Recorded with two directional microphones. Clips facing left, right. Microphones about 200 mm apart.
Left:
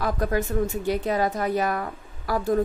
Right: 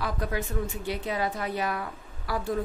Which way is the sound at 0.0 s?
45° left (ahead or behind).